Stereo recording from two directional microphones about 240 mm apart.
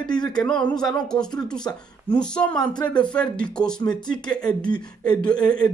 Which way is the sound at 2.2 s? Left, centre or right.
Centre.